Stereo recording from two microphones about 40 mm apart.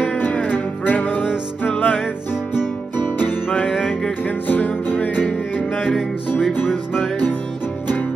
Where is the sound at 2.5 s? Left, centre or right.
Left.